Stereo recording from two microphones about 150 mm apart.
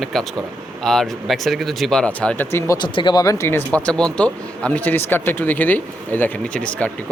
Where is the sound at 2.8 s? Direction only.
30° left (ahead or behind).